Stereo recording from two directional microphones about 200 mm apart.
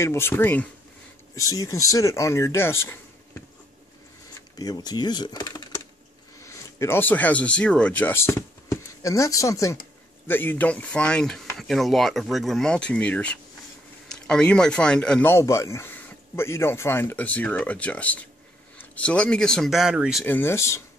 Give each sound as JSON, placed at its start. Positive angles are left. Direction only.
{"t": 0.0, "sound": "speech", "side_deg": 10}
{"t": 4.6, "sound": "speech", "side_deg": 20}
{"t": 20.2, "sound": "speech", "side_deg": 10}